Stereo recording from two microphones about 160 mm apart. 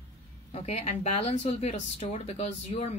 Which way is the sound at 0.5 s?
40° left (ahead or behind).